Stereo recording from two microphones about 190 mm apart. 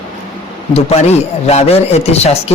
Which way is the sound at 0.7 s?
30° left (ahead or behind).